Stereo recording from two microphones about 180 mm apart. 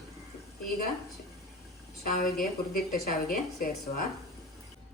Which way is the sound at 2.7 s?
55° left (ahead or behind).